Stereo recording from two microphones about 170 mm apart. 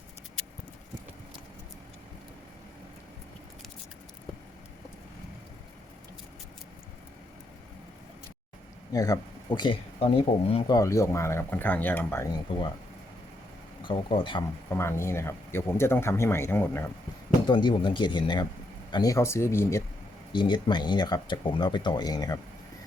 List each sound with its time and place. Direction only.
8.9 s speech: 20° left (ahead or behind)
12.5 s speech: 30° left (ahead or behind)
13.8 s speech: 30° left (ahead or behind)
14.7 s speech: 15° left (ahead or behind)
17.5 s speech: 30° left (ahead or behind)
20.3 s speech: 25° left (ahead or behind)